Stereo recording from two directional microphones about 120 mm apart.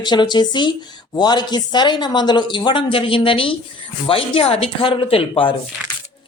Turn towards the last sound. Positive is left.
turn(degrees=45)  # may be behind; listen again after turning